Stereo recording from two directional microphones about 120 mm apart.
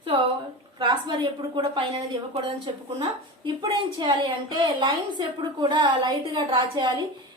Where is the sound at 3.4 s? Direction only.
35° right (ahead or behind).